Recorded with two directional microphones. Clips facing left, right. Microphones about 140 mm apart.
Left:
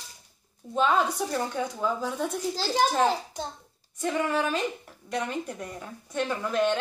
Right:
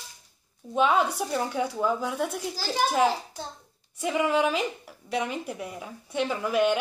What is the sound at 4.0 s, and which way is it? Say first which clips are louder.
A woman's voice: right 2 dB; 10° right (ahead or behind).